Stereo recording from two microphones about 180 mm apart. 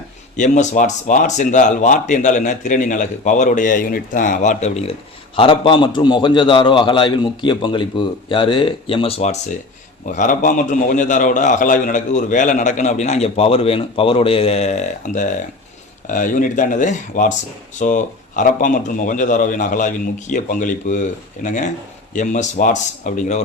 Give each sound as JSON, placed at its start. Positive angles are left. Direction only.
{"t": 0.3, "sound": "a man's voice", "side_deg": 40}
{"t": 5.4, "sound": "a man's voice", "side_deg": 30}